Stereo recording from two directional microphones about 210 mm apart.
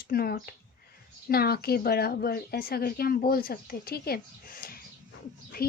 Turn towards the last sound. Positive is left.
turn(degrees=45)  # may be behind; listen again after turning